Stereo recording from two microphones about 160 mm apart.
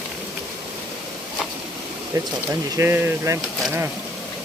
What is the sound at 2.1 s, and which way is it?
Speech, 20° right (ahead or behind).